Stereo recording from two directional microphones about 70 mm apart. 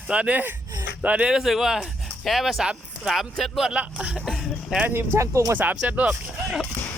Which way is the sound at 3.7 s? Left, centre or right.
Centre.